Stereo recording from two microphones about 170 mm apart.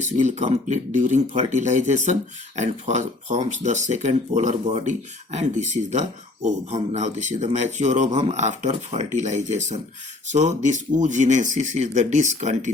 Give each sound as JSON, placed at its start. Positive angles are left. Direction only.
{"t": 0.2, "sound": "speech", "side_deg": -45}